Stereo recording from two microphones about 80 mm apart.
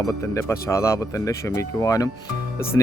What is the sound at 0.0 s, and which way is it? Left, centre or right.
Speech, left.